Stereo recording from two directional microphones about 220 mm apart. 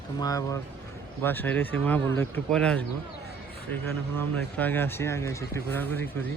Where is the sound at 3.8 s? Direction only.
10° left (ahead or behind).